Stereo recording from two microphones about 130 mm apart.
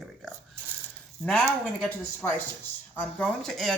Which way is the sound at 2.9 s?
10° left (ahead or behind).